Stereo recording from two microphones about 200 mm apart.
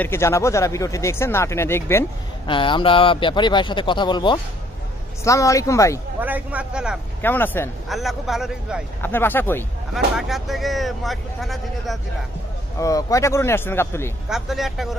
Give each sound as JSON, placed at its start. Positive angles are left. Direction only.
{"t": 0.0, "sound": "speech", "side_deg": 15}
{"t": 2.4, "sound": "a man's voice", "side_deg": 25}
{"t": 6.2, "sound": "speech", "side_deg": -5}
{"t": 7.2, "sound": "speech", "side_deg": 10}
{"t": 7.9, "sound": "speech", "side_deg": 0}
{"t": 9.0, "sound": "speech", "side_deg": 10}
{"t": 9.9, "sound": "speech", "side_deg": 0}
{"t": 12.7, "sound": "speech", "side_deg": 15}
{"t": 14.3, "sound": "speech", "side_deg": 0}